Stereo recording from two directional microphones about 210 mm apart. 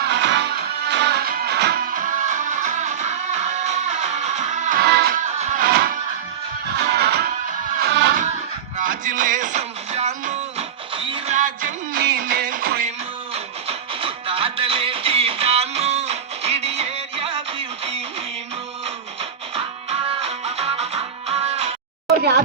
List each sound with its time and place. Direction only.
0.0 s music: 55° right (ahead or behind); by 4.8 s 35° right (ahead or behind)
4.8 s music: 50° right (ahead or behind)
8.8 s music: 40° right (ahead or behind)
13.3 s music: 25° right (ahead or behind)
19.5 s music: 25° right (ahead or behind)